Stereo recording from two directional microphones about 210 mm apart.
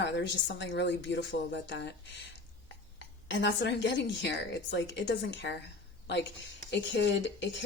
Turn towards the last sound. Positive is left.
turn(degrees=60)  # may be behind; listen again after turning